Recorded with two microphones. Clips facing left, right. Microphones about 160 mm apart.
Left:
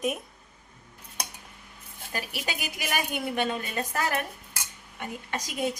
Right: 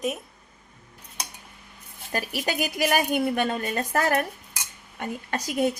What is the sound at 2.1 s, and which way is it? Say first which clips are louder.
A woman's voice: right 6 dB; 50° right (ahead or behind).